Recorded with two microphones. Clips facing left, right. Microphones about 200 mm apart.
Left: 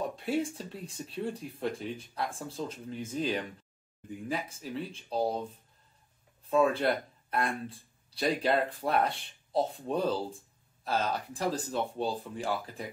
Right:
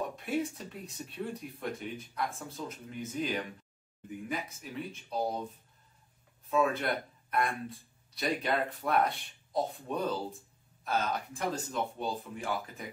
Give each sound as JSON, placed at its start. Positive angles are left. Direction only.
{"t": 0.1, "sound": "speech", "side_deg": 30}
{"t": 6.5, "sound": "speech", "side_deg": 30}